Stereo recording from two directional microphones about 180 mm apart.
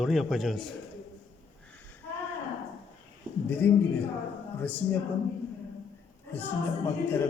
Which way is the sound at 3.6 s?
10° left (ahead or behind).